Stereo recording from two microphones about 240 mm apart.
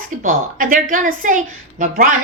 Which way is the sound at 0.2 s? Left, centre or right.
Right.